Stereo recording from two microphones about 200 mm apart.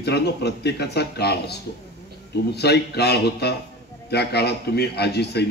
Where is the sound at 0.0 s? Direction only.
55° left (ahead or behind).